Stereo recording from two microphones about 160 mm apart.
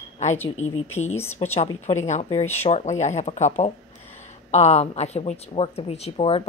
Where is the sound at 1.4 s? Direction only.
30° left (ahead or behind).